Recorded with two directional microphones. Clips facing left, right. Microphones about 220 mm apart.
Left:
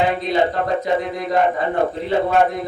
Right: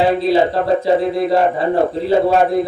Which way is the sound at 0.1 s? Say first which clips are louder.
Right 5 dB; 30° right (ahead or behind).